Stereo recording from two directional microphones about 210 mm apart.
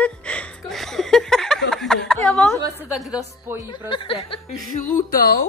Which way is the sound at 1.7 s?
Centre (ahead or behind).